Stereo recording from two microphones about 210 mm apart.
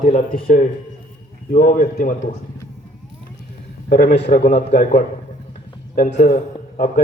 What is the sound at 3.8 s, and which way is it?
A man's voice, 45° left (ahead or behind).